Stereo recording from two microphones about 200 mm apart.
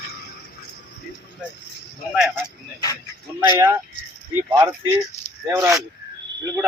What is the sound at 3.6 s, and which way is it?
Speech, 15° right (ahead or behind).